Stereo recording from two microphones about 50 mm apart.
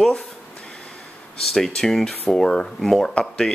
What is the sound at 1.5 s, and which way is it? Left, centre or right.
Speech, centre.